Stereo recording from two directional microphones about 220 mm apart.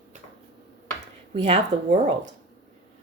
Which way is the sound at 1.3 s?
30° right (ahead or behind).